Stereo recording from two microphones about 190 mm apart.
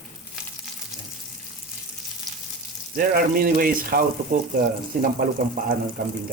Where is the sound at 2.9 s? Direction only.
50° right (ahead or behind).